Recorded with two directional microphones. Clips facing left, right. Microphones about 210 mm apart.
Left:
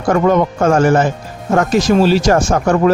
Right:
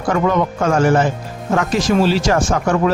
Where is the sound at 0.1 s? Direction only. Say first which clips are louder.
Left 4 dB; 45° left (ahead or behind).